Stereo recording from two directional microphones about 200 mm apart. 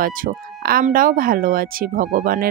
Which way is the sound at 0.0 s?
45° right (ahead or behind).